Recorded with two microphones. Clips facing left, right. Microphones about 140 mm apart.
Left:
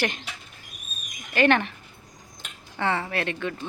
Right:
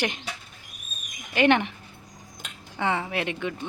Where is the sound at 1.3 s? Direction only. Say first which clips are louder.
Even; 15° right (ahead or behind).